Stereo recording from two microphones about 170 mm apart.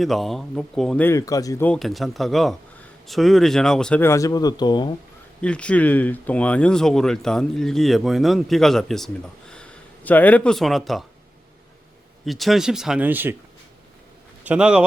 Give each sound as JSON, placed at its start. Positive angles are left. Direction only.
{"t": 0.0, "sound": "speech", "side_deg": 0}
{"t": 1.6, "sound": "speech", "side_deg": 5}
{"t": 5.4, "sound": "speech", "side_deg": 5}
{"t": 12.2, "sound": "speech", "side_deg": 0}
{"t": 14.4, "sound": "a man's voice", "side_deg": -5}